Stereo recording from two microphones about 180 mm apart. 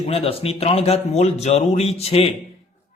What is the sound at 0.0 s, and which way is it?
A man's voice, 30° left (ahead or behind).